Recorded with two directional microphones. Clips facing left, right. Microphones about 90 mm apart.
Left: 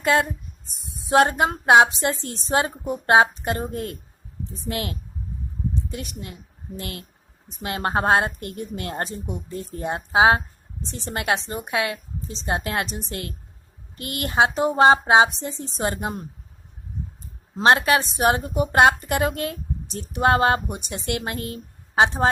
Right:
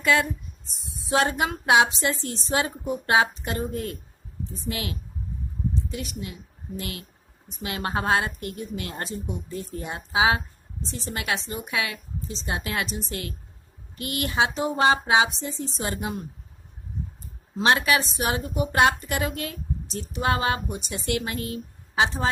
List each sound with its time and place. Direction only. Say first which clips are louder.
0.0 s a woman's voice: left 2 dB; 45° left (ahead or behind)
17.6 s a woman's voice: left 4 dB; 45° left (ahead or behind)